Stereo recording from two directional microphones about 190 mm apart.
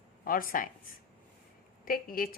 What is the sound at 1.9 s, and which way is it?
Speech, 50° left (ahead or behind).